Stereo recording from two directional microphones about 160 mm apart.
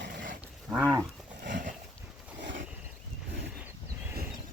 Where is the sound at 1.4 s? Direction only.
55° right (ahead or behind).